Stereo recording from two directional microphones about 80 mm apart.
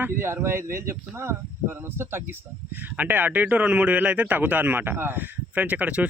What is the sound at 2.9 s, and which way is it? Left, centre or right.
Speech, right.